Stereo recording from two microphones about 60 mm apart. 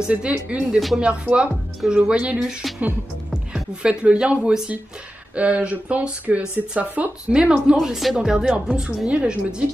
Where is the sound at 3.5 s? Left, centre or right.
Centre.